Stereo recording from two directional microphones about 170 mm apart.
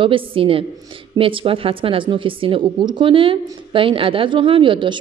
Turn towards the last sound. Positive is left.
turn(degrees=-30)  # may be behind; listen again after turning